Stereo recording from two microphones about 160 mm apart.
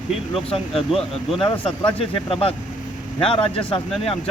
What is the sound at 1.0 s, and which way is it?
Speech, 35° left (ahead or behind).